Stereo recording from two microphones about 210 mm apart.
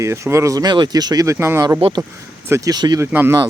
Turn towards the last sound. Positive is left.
turn(degrees=-15)  # may be behind; listen again after turning